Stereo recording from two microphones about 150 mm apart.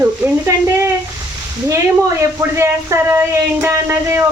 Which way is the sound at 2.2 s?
20° right (ahead or behind).